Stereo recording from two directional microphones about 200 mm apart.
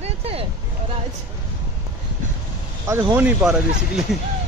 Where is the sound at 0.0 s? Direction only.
30° right (ahead or behind).